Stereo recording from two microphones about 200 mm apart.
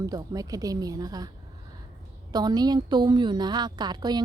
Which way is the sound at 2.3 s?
20° right (ahead or behind).